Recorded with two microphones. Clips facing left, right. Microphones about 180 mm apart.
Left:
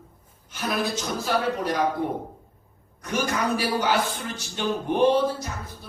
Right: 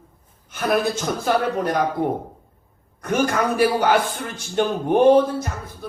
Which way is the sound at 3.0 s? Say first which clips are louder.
Right 6 dB; 50° right (ahead or behind).